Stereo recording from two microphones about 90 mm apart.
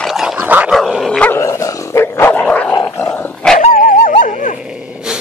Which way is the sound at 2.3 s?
15° left (ahead or behind).